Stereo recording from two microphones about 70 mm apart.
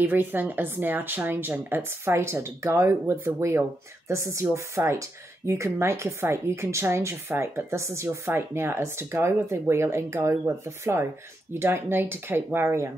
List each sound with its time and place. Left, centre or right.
0.0 s a woman's voice: right